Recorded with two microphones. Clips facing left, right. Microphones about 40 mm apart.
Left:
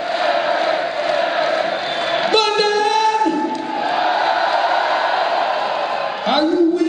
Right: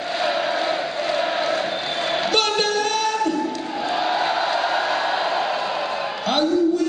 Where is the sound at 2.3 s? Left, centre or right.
Left.